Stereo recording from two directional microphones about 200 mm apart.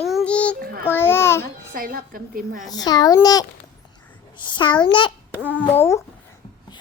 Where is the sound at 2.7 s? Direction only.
20° left (ahead or behind).